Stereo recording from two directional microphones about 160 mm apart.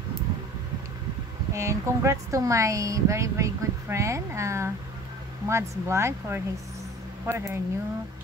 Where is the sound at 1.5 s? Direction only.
20° right (ahead or behind).